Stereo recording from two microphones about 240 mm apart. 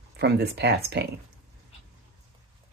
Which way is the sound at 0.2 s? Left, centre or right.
Right.